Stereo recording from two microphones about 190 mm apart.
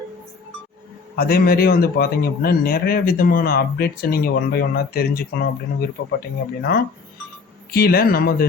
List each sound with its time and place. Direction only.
1.1 s speech: 50° left (ahead or behind)